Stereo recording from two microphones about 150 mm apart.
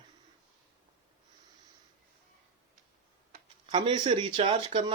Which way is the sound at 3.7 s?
30° right (ahead or behind).